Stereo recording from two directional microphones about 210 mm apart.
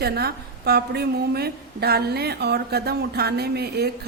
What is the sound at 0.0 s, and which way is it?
A woman's voice, 50° right (ahead or behind).